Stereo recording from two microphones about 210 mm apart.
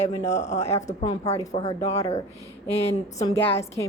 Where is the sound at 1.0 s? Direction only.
20° left (ahead or behind).